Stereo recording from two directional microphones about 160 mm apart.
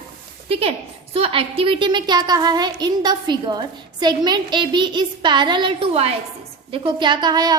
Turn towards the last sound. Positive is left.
turn(degrees=-25)  # may be behind; listen again after turning